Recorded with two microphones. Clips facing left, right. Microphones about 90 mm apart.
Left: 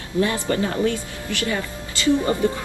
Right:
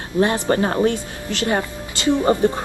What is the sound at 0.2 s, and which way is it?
Speech, 35° right (ahead or behind).